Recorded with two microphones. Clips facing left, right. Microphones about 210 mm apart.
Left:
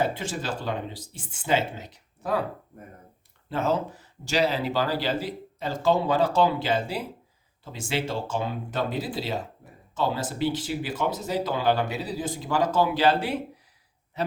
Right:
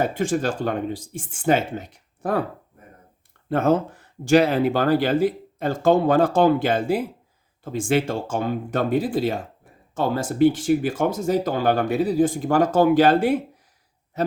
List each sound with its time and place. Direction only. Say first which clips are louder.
0.0 s speech: right 6 dB; 50° right (ahead or behind)
3.5 s speech: right 6 dB; 55° right (ahead or behind)
14.2 s a sound: right 6 dB; 45° right (ahead or behind)